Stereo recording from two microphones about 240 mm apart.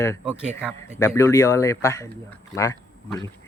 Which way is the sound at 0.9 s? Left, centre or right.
Centre.